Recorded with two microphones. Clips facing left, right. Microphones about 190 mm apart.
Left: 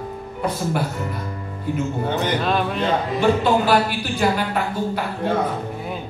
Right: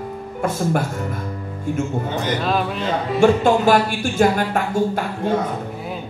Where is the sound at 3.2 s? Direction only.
45° right (ahead or behind).